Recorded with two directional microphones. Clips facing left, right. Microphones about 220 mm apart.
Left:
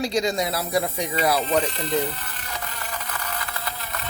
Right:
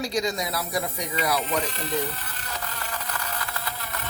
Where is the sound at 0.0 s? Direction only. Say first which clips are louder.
Left 4 dB; 25° left (ahead or behind).